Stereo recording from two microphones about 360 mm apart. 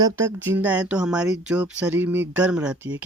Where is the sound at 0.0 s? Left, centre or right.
Centre.